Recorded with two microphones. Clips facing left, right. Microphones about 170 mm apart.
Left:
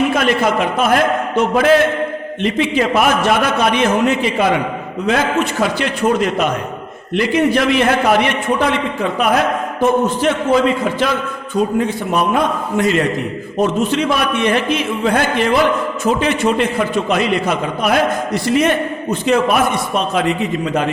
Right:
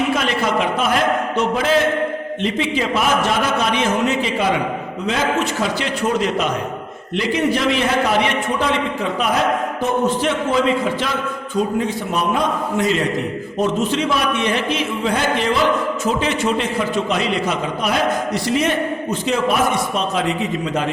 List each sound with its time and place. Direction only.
0.1 s a man's voice: 55° left (ahead or behind)
9.8 s a man's voice: 45° left (ahead or behind)
11.8 s a man's voice: 60° left (ahead or behind)